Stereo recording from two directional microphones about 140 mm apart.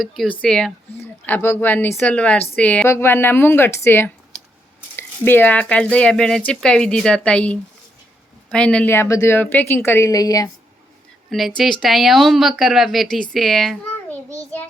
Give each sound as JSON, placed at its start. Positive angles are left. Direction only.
{"t": 0.0, "sound": "speech", "side_deg": 0}
{"t": 11.3, "sound": "speech", "side_deg": 0}